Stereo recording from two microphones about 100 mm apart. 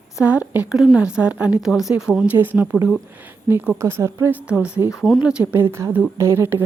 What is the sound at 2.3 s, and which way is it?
Speech, 20° right (ahead or behind).